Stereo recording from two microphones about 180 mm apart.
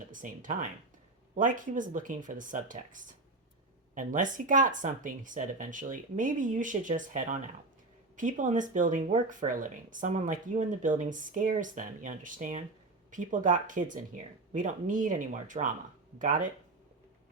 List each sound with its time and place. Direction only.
0.1 s speech: 45° right (ahead or behind)